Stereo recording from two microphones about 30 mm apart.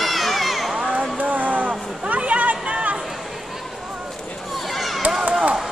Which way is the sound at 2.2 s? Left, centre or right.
Right.